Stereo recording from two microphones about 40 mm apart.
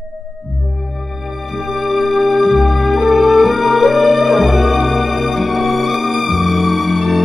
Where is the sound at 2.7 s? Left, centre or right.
Centre.